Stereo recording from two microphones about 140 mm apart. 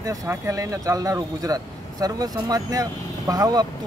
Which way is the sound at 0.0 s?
25° right (ahead or behind).